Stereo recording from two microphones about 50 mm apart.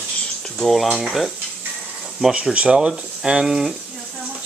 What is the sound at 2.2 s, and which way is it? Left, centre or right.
Speech, centre.